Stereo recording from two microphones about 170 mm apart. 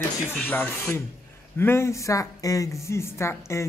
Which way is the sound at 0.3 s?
10° left (ahead or behind).